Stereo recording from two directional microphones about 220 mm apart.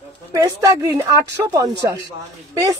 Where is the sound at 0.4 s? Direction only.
15° right (ahead or behind).